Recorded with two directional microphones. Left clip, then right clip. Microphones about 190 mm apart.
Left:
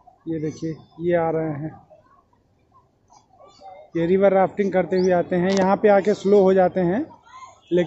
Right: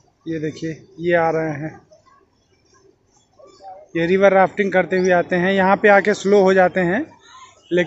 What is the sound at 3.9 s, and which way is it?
A man's voice, 5° left (ahead or behind).